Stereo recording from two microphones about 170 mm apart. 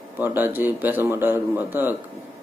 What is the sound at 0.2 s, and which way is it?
Speech, 10° right (ahead or behind).